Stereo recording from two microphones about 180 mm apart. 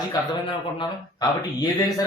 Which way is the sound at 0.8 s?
20° left (ahead or behind).